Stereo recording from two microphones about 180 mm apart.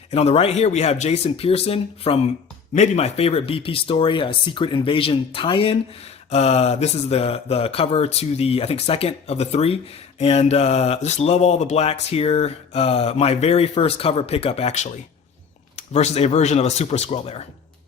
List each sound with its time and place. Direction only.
0.1 s speech: 35° left (ahead or behind)